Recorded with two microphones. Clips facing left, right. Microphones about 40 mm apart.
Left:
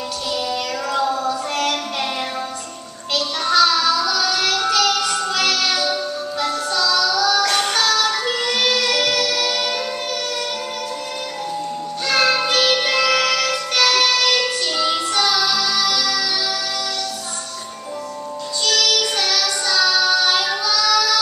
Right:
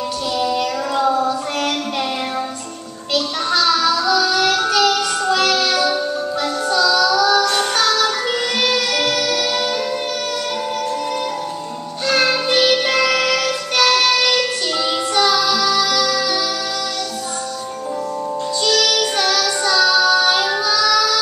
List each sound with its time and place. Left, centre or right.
0.5 s child singing: centre
1.0 s female singing: centre
3.4 s child singing: centre
4.8 s music: centre
6.9 s child singing: centre
8.4 s music: centre
12.4 s music: centre
18.9 s child singing: centre
19.6 s child singing: centre